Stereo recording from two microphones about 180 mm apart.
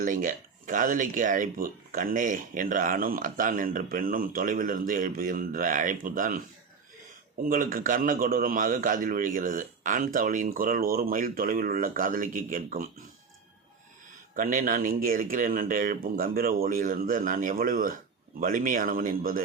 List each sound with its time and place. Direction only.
0.0 s speech: 50° right (ahead or behind)
7.4 s speech: 50° right (ahead or behind)
14.3 s speech: 50° right (ahead or behind)